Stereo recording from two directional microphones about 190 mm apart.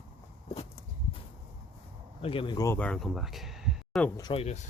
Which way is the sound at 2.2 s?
30° left (ahead or behind).